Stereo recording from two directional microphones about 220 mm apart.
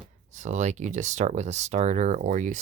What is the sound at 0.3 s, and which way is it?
Speech, 35° right (ahead or behind).